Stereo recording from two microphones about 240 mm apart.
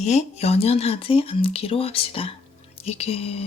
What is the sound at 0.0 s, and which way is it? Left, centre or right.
Speech, left.